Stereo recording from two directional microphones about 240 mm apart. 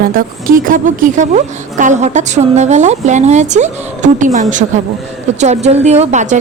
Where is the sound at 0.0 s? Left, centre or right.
Right.